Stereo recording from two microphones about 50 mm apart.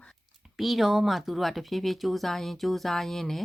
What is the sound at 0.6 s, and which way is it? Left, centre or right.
Speech, centre.